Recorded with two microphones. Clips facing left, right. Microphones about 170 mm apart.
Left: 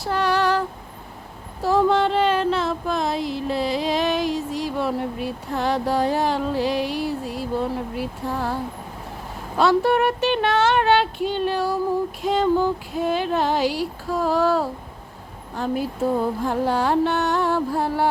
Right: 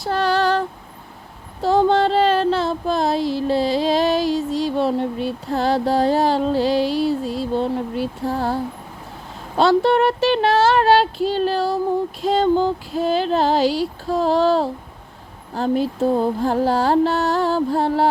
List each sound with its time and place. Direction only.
0.1 s female singing: 30° right (ahead or behind)
1.6 s a sound: 30° right (ahead or behind)
9.6 s speech: 30° right (ahead or behind)